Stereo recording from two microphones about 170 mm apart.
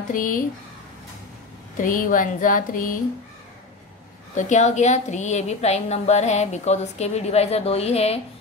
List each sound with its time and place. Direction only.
0.1 s speech: 50° left (ahead or behind)
1.8 s speech: 50° left (ahead or behind)
4.4 s a woman's voice: 45° left (ahead or behind)